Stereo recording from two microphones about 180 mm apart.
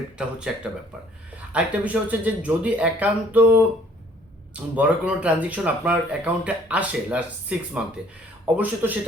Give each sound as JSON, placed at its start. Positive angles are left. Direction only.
{"t": 0.2, "sound": "speech", "side_deg": -5}
{"t": 1.5, "sound": "speech", "side_deg": -10}
{"t": 4.7, "sound": "speech", "side_deg": -10}